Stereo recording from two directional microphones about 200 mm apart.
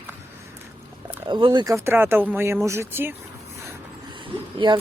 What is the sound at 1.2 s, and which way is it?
Speech, 20° right (ahead or behind).